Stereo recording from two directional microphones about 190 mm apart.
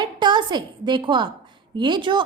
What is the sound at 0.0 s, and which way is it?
A woman's voice, 25° right (ahead or behind).